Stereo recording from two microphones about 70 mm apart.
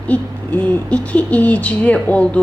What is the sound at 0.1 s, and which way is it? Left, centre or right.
Speech, left.